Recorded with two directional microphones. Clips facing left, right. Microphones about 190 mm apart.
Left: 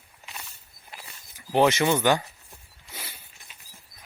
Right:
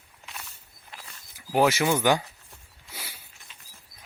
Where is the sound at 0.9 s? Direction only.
5° left (ahead or behind).